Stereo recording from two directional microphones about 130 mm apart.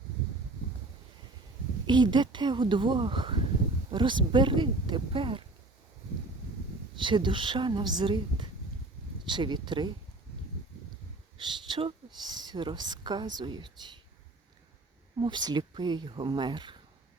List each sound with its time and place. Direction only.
1.9 s a woman's voice: 35° right (ahead or behind)
7.0 s a woman's voice: 40° right (ahead or behind)
11.3 s a woman's voice: 35° right (ahead or behind)
15.2 s a woman's voice: 35° right (ahead or behind)